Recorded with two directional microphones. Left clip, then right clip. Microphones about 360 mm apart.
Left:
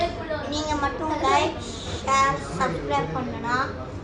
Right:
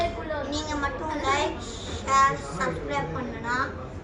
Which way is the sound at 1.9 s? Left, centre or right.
Centre.